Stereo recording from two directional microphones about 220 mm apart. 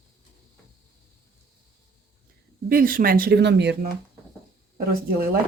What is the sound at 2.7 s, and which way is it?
Speech, 40° right (ahead or behind).